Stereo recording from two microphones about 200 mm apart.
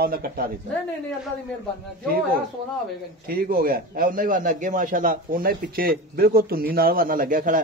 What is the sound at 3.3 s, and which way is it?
A man's voice, 45° right (ahead or behind).